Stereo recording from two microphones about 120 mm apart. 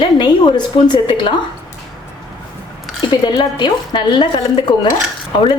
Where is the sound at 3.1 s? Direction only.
40° left (ahead or behind).